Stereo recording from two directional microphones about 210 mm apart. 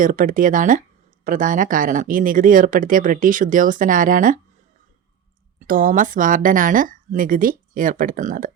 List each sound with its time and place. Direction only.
0.0 s speech: 40° right (ahead or behind)
5.5 s speech: 40° right (ahead or behind)